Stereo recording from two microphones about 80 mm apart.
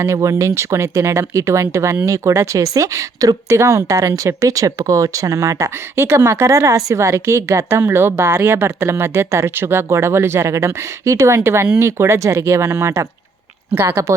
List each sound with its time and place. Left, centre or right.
0.0 s speech: right